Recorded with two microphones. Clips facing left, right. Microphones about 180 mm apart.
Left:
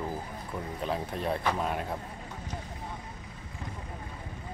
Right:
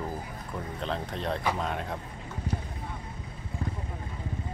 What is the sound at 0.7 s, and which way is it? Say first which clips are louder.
Speech: left 1 dB; 10° left (ahead or behind).